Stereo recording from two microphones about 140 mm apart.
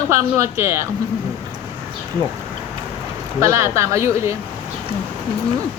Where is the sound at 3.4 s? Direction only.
20° right (ahead or behind).